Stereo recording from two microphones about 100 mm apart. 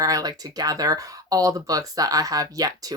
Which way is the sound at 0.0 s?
35° right (ahead or behind).